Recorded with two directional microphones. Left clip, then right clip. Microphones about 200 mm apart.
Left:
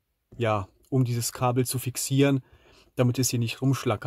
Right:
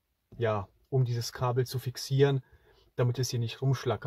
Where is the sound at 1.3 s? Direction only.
55° left (ahead or behind).